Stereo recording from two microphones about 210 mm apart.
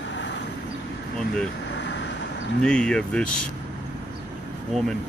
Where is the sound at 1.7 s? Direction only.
55° left (ahead or behind).